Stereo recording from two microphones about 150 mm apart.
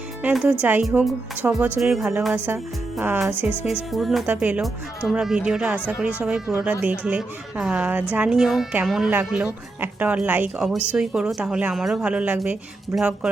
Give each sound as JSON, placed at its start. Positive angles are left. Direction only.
{"t": 0.2, "sound": "speech", "side_deg": -10}
{"t": 1.8, "sound": "a woman's voice", "side_deg": 0}